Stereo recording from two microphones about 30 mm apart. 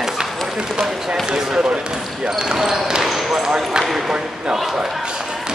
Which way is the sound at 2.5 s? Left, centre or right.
Centre.